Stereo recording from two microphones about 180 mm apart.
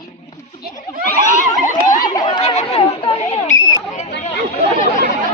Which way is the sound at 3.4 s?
45° left (ahead or behind).